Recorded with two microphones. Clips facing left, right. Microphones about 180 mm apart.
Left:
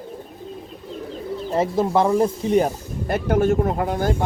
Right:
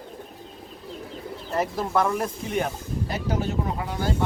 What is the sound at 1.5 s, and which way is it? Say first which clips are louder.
Speech: left 5 dB; 25° left (ahead or behind).